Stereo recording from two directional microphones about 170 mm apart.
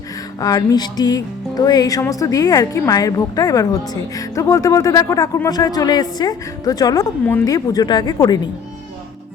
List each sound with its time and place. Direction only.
0.3 s music: 20° left (ahead or behind)